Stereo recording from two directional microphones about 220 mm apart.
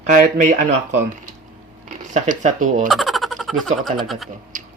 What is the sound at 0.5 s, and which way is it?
Speech, 30° right (ahead or behind).